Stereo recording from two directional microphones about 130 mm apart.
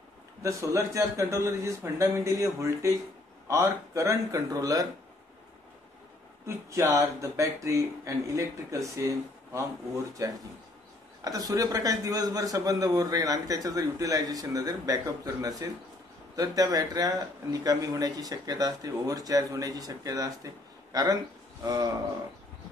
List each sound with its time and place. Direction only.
0.4 s a man's voice: 25° right (ahead or behind)
6.4 s a man's voice: 20° right (ahead or behind)